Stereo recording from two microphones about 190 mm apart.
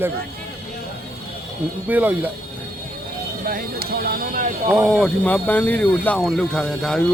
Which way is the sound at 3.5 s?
50° right (ahead or behind).